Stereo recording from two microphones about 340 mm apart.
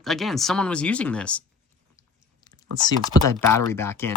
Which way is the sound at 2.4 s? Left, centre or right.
Centre.